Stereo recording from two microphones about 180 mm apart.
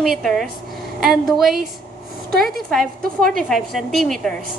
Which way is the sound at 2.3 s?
55° right (ahead or behind).